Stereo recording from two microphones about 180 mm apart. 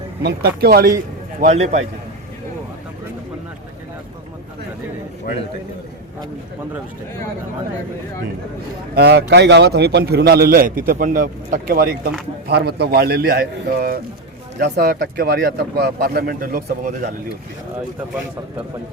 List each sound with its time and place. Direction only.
0.2 s a man's voice: 65° right (ahead or behind)
1.4 s a man's voice: 40° right (ahead or behind)
9.0 s a man's voice: 65° right (ahead or behind)
12.5 s a man's voice: 65° right (ahead or behind); by 17.1 s 50° right (ahead or behind)